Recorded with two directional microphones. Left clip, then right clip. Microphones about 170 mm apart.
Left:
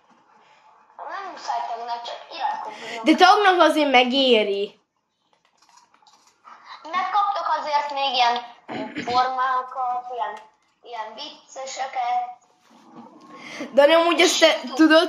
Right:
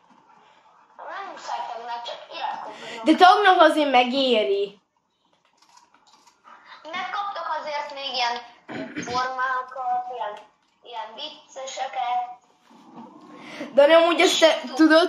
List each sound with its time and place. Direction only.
1.3 s speech: 25° left (ahead or behind)
6.4 s a sound: 40° left (ahead or behind)
8.6 s beatboxing: 15° left (ahead or behind)
9.0 s speech: 55° left (ahead or behind)
10.8 s a woman's voice: 30° left (ahead or behind)
13.5 s speech: 35° left (ahead or behind); by 15.0 s 10° left (ahead or behind)